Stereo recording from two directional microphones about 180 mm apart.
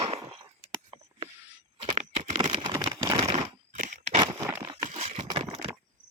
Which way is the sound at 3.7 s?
45° right (ahead or behind).